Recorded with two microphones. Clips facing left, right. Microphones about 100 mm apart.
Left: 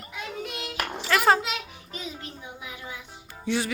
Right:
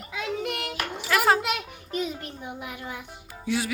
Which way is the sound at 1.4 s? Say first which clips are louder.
Right 4 dB; 55° right (ahead or behind).